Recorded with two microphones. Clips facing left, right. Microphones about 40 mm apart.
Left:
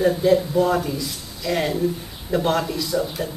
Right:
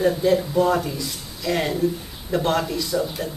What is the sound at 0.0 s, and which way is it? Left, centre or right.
Speech, centre.